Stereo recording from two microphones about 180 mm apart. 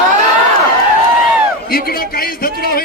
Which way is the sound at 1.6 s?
60° left (ahead or behind).